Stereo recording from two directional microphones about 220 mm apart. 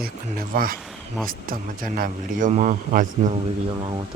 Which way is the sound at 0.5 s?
40° right (ahead or behind).